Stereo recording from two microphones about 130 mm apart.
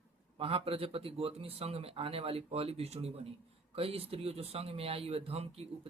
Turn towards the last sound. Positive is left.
turn(degrees=-50)  # may be behind; listen again after turning